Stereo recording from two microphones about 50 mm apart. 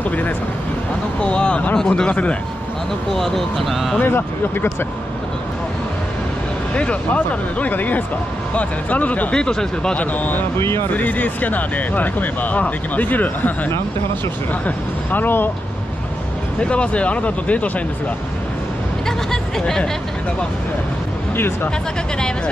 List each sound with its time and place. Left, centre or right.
0.0 s speech: left
1.2 s speech: left
2.0 s speech: left
3.1 s speech: centre
4.0 s speech: left
6.7 s speech: left
7.2 s speech: left
9.3 s speech: centre
9.9 s speech: left
10.6 s speech: left
10.9 s speech: left
15.0 s speech: left
16.5 s speech: left